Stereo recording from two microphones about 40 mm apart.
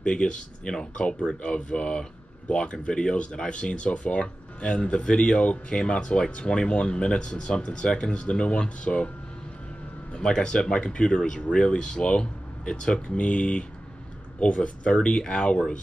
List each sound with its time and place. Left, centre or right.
0.0 s speech: left
10.1 s speech: centre